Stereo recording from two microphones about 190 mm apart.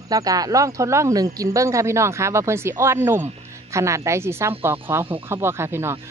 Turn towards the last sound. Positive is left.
turn(degrees=-15)  # may be behind; listen again after turning